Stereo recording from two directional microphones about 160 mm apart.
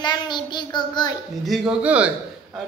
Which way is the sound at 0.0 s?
30° left (ahead or behind).